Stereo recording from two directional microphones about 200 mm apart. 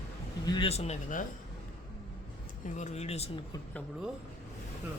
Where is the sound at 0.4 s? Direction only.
25° left (ahead or behind).